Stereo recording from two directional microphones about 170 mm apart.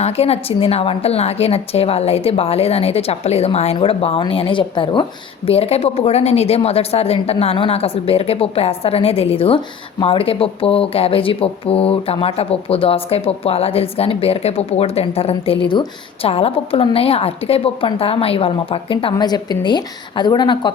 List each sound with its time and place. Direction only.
0.0 s a woman's voice: 35° left (ahead or behind)